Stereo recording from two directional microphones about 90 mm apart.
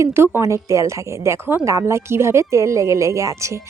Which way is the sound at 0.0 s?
30° right (ahead or behind).